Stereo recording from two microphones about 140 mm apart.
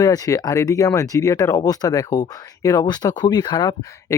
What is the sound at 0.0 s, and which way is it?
Speech, 25° left (ahead or behind).